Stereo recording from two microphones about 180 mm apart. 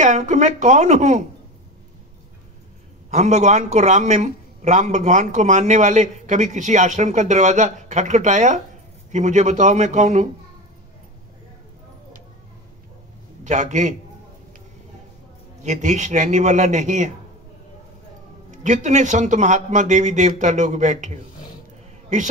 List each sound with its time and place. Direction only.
0.0 s a man's voice: 40° right (ahead or behind)
3.1 s a man's voice: 40° right (ahead or behind)
13.4 s a man's voice: 40° right (ahead or behind)
15.6 s a man's voice: 40° right (ahead or behind)
18.5 s a man's voice: 40° right (ahead or behind)